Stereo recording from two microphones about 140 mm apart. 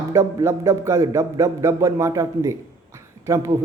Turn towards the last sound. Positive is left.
turn(degrees=-20)  # may be behind; listen again after turning